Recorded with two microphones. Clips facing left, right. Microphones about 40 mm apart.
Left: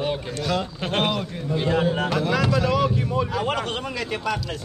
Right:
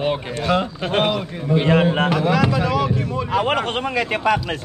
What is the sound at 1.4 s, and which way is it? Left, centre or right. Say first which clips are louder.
Speech: right 6 dB; right.